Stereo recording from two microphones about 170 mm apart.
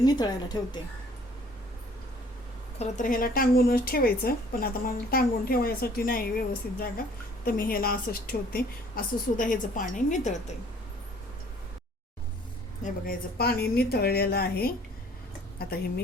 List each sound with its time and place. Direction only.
0.0 s a woman's voice: 25° left (ahead or behind)
2.7 s speech: 45° left (ahead or behind)
12.8 s a woman's voice: 60° left (ahead or behind)